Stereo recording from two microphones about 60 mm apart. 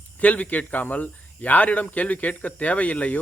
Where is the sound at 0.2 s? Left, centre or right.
Left.